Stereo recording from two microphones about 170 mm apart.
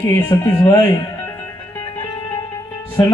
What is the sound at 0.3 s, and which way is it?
Speech, 20° left (ahead or behind).